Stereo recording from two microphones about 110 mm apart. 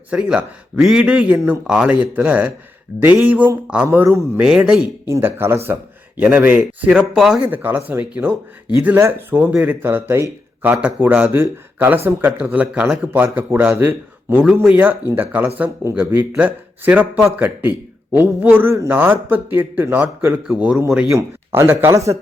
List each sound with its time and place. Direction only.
0.1 s speech: 10° right (ahead or behind)
4.4 s speech: 10° right (ahead or behind)
5.0 s speech: 25° right (ahead or behind); by 7.4 s 5° right (ahead or behind)
7.4 s speech: 15° right (ahead or behind)
14.4 s speech: 10° right (ahead or behind)
21.1 s speech: 25° right (ahead or behind)